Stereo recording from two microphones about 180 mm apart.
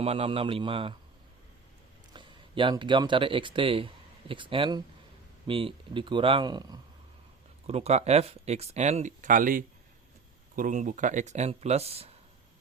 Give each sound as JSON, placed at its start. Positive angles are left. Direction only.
{"t": 0.0, "sound": "speech", "side_deg": -35}
{"t": 2.1, "sound": "speech", "side_deg": -25}
{"t": 7.7, "sound": "speech", "side_deg": -35}